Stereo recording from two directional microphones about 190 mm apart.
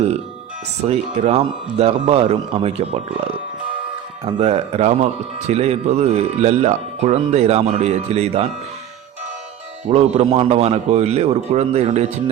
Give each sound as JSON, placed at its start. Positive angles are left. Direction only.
{"t": 0.9, "sound": "speech", "side_deg": -35}
{"t": 9.9, "sound": "speech", "side_deg": -35}